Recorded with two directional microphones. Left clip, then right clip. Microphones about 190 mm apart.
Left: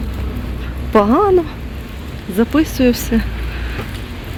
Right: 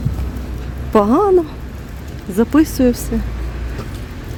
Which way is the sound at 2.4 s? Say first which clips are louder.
Right 1 dB; 35° right (ahead or behind).